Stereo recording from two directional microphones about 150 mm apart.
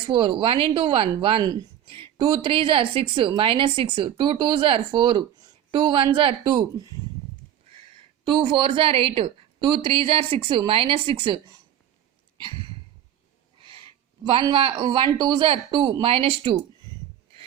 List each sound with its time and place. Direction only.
0.0 s speech: 35° right (ahead or behind)
8.2 s speech: 30° right (ahead or behind)
13.6 s a sound: 35° right (ahead or behind)
14.5 s speech: 35° right (ahead or behind)